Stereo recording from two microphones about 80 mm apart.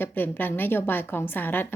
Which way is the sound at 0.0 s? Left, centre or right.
Left.